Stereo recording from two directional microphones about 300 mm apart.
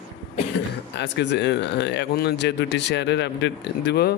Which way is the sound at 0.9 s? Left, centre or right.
Left.